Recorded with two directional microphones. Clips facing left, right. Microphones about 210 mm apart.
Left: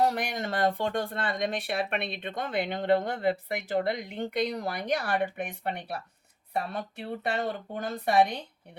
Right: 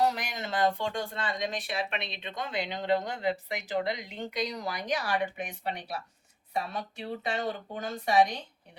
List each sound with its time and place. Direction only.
0.0 s speech: 55° left (ahead or behind)